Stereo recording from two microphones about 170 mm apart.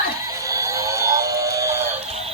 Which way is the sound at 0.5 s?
20° right (ahead or behind).